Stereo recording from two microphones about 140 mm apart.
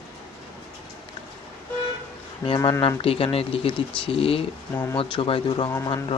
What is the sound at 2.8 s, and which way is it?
Speech, 40° left (ahead or behind).